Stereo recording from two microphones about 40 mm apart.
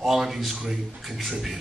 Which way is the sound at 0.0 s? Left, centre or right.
Centre.